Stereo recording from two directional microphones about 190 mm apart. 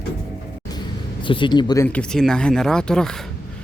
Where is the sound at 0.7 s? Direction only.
25° left (ahead or behind).